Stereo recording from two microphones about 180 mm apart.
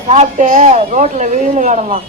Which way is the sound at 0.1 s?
40° right (ahead or behind).